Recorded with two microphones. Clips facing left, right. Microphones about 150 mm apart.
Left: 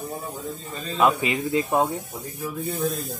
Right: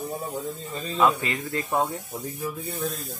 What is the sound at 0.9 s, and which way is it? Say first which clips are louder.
Speech: left 2 dB; 15° left (ahead or behind).